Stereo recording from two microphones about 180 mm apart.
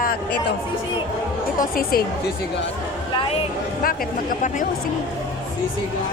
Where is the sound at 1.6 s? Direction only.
55° left (ahead or behind).